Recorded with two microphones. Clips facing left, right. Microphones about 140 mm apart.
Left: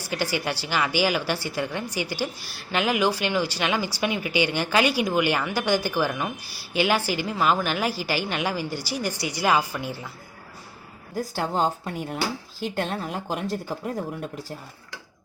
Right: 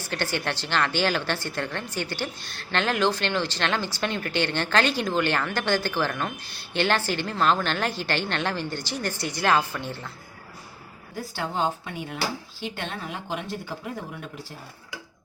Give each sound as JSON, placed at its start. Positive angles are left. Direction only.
{"t": 0.0, "sound": "a woman's voice", "side_deg": 10}
{"t": 11.3, "sound": "speech", "side_deg": 40}